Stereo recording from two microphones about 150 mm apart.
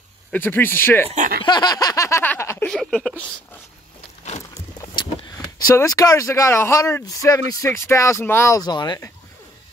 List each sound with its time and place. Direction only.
0.3 s speech: 15° left (ahead or behind)
1.0 s speech: 55° right (ahead or behind)
1.4 s a sound: 30° left (ahead or behind)
2.7 s speech: centre (ahead or behind)
5.7 s speech: 20° left (ahead or behind)